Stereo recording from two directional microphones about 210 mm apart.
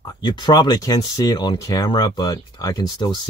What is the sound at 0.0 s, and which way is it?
Speech, 20° left (ahead or behind).